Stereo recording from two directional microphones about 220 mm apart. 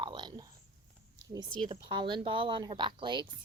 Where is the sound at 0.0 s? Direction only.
20° right (ahead or behind).